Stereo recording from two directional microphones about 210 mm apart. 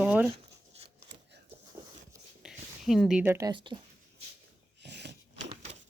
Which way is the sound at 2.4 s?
Centre (ahead or behind).